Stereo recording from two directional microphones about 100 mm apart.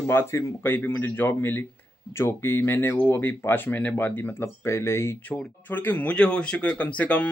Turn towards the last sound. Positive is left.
turn(degrees=15)  # may be behind; listen again after turning